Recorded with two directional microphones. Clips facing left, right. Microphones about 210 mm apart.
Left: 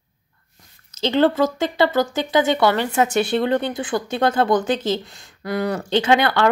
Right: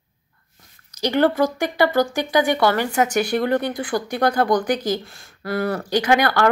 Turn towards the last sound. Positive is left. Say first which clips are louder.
# left 1 dB
turn(degrees=20)  # may be behind; listen again after turning